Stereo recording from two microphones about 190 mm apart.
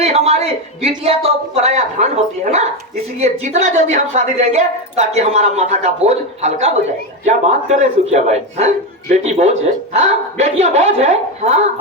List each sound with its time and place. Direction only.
0.0 s speech: 35° right (ahead or behind)